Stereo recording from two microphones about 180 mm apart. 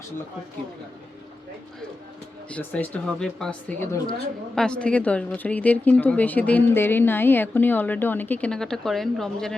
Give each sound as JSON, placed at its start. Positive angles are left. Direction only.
{"t": 2.5, "sound": "speech", "side_deg": 10}